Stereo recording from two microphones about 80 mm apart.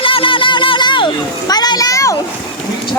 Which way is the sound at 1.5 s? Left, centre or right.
Left.